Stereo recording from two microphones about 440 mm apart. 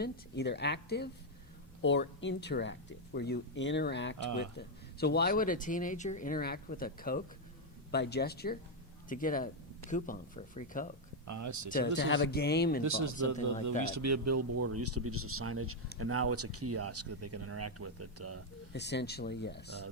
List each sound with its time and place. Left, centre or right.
0.0 s speech: left
11.3 s speech: right
11.7 s speech: left
12.8 s speech: right
18.7 s speech: left